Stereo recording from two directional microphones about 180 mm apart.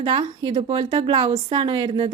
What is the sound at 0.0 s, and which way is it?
A woman's voice, 30° right (ahead or behind).